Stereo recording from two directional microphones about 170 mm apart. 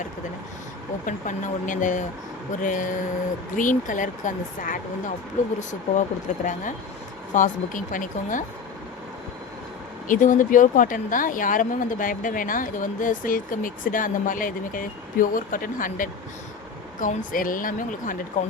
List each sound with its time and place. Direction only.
1.0 s a woman's voice: 50° left (ahead or behind)
10.1 s a woman's voice: 50° left (ahead or behind)